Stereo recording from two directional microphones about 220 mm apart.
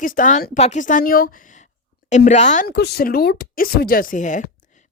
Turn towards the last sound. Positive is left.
turn(degrees=35)  # may be behind; listen again after turning